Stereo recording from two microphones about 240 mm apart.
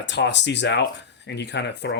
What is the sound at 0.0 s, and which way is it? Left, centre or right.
Speech, left.